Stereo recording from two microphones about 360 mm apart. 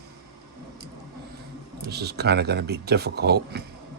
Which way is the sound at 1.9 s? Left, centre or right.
Right.